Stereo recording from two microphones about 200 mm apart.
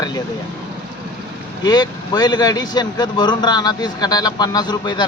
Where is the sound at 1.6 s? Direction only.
20° left (ahead or behind).